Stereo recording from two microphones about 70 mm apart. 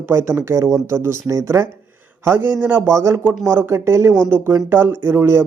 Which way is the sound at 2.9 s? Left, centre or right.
Right.